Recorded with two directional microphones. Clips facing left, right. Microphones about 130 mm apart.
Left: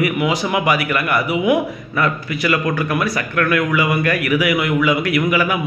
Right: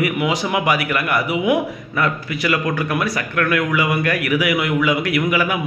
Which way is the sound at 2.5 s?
15° right (ahead or behind).